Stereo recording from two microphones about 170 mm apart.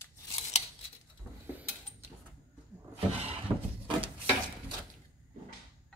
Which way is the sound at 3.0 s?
35° right (ahead or behind).